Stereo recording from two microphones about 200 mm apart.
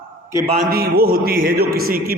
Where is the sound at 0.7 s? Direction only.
50° right (ahead or behind).